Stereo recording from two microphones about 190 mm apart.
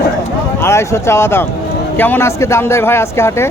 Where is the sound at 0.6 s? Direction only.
15° left (ahead or behind).